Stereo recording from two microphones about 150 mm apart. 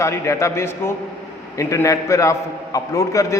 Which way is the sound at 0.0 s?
20° left (ahead or behind).